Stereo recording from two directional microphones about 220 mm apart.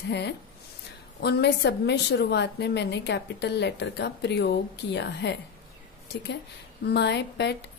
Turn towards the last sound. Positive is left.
turn(degrees=50)  # may be behind; listen again after turning